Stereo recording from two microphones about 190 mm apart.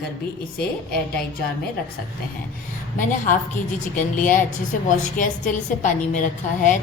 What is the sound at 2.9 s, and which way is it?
A woman's voice, 45° left (ahead or behind).